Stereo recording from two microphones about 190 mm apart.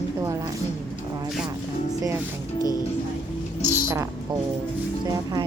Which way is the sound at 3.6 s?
15° right (ahead or behind).